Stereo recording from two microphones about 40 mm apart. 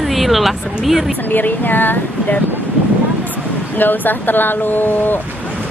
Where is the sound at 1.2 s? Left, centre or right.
Left.